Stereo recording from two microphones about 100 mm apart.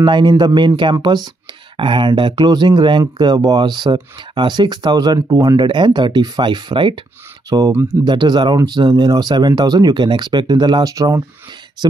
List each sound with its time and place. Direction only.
0.0 s speech: 50° right (ahead or behind)
5.7 s speech: 50° right (ahead or behind)
7.4 s speech: 40° right (ahead or behind)
7.7 s speech: 25° right (ahead or behind)
8.0 s speech: 45° right (ahead or behind)